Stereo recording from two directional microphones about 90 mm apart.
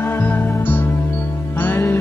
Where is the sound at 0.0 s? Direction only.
20° left (ahead or behind).